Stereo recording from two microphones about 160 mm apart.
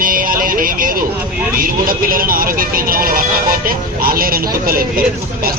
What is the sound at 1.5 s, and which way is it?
A man's voice, 60° right (ahead or behind).